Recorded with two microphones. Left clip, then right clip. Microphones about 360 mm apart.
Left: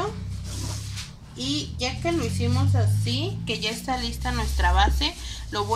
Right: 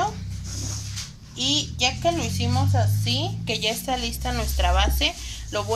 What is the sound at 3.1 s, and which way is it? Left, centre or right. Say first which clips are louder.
A woman's voice: right 2 dB; centre.